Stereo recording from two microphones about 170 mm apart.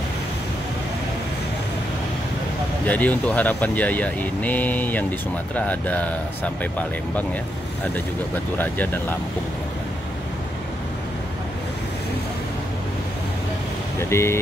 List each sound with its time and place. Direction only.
2.9 s speech: 10° left (ahead or behind)
8.5 s speech: 10° left (ahead or behind)
13.9 s speech: 15° left (ahead or behind)